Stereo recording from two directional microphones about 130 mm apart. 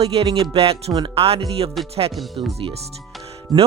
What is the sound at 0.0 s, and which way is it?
Speech, 50° right (ahead or behind).